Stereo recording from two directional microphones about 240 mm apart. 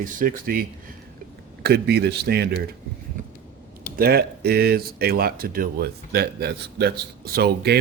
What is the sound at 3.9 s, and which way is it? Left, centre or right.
Speech, right.